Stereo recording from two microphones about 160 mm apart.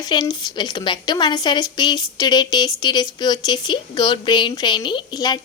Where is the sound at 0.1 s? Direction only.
25° left (ahead or behind).